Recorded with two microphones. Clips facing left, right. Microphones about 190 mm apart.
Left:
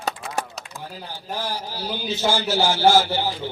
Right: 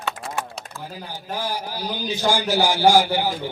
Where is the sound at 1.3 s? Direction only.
10° right (ahead or behind).